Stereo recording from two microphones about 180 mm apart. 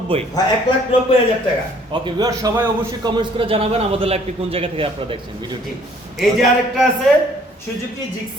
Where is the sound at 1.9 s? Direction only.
20° right (ahead or behind).